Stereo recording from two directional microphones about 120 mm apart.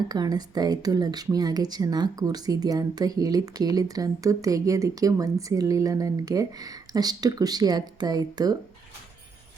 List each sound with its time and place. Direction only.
0.1 s a woman's voice: 35° right (ahead or behind)